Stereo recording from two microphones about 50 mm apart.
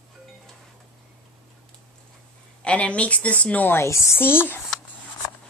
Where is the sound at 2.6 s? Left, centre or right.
Left.